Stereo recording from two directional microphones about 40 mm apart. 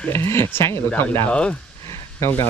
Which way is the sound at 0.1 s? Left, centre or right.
Left.